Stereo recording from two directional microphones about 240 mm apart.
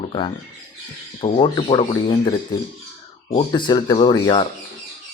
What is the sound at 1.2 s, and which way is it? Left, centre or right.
Speech, left.